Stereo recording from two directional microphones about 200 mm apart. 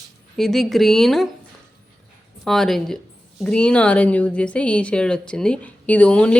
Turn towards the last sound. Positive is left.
turn(degrees=5)  # may be behind; listen again after turning